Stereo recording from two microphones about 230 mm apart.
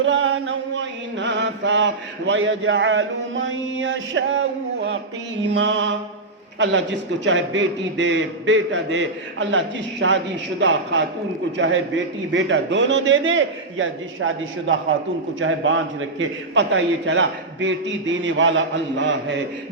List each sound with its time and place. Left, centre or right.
0.0 s mantra: right
5.5 s a man's voice: right